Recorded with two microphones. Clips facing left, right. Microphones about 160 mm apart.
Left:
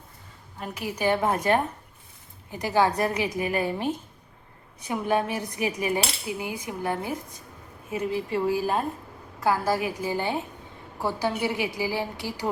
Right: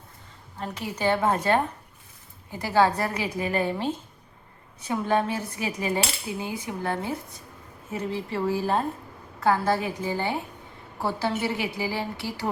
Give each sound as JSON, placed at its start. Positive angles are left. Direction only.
{"t": 0.6, "sound": "cutlery", "side_deg": 10}